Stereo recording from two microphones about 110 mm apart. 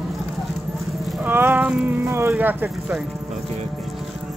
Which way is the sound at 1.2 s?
20° right (ahead or behind).